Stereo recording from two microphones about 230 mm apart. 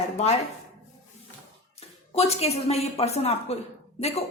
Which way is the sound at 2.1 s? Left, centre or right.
Left.